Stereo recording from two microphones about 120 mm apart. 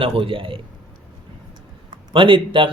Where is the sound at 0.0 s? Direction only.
50° right (ahead or behind).